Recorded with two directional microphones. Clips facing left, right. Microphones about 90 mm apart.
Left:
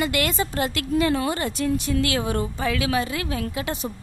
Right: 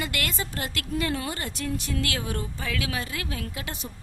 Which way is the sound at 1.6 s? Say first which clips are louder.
Left 6 dB; 20° left (ahead or behind).